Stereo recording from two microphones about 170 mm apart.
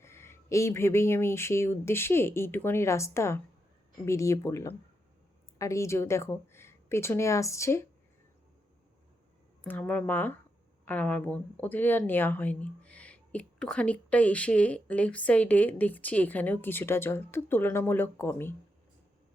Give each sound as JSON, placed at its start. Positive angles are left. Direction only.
{"t": 0.0, "sound": "speech", "side_deg": 15}
{"t": 9.6, "sound": "speech", "side_deg": 5}